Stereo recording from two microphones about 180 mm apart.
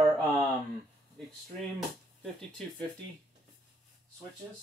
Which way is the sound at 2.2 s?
5° left (ahead or behind).